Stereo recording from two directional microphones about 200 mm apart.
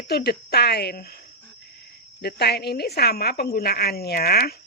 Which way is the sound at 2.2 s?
55° left (ahead or behind).